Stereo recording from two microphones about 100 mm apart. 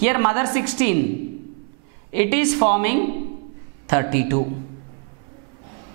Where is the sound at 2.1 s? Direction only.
10° right (ahead or behind).